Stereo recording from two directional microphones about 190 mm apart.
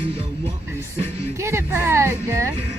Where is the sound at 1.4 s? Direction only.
15° right (ahead or behind).